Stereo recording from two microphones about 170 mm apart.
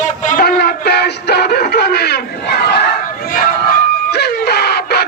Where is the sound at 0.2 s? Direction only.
50° left (ahead or behind).